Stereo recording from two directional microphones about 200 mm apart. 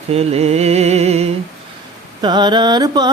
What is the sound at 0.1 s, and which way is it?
Music, 30° right (ahead or behind).